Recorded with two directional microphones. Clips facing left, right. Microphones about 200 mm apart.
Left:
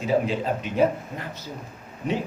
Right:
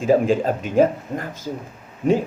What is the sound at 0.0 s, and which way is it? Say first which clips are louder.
A man's voice: right 6 dB; 45° right (ahead or behind).